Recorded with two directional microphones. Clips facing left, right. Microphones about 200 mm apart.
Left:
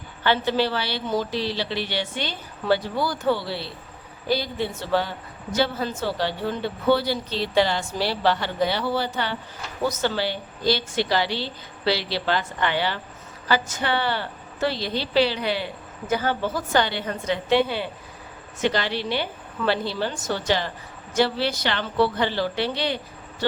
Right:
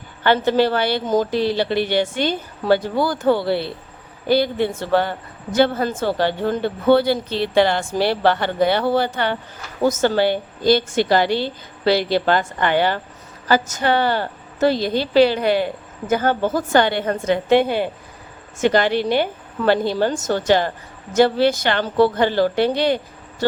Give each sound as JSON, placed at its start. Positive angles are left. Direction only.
{"t": 0.3, "sound": "a woman's voice", "side_deg": -50}